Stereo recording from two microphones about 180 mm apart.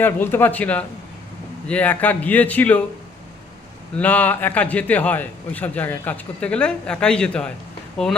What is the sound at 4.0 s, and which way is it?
A man's voice, 10° left (ahead or behind).